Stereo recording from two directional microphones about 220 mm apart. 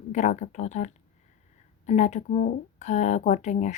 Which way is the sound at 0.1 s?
30° left (ahead or behind).